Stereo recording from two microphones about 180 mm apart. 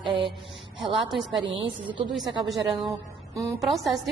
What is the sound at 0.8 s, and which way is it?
A woman's voice, centre (ahead or behind).